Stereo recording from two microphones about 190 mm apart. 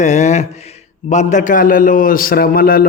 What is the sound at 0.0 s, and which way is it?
A man's voice, 40° left (ahead or behind).